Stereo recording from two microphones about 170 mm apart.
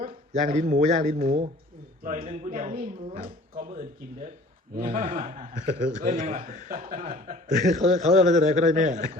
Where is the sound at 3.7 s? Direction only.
50° right (ahead or behind).